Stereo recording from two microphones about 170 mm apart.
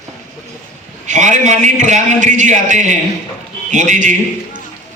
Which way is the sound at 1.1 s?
45° right (ahead or behind).